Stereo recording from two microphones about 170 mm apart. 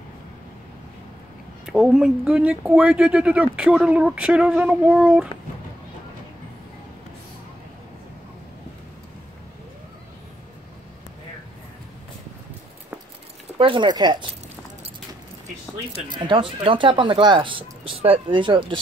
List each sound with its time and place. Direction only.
1.7 s speech: centre (ahead or behind)
13.6 s speech: 30° right (ahead or behind)
15.9 s speech: 30° right (ahead or behind)